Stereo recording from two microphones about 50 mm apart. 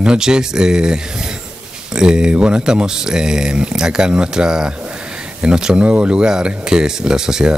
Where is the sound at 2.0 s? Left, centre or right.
Centre.